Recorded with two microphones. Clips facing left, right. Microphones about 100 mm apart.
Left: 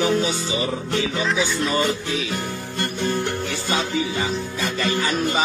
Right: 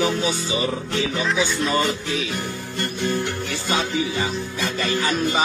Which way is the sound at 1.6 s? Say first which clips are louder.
Even; 20° right (ahead or behind).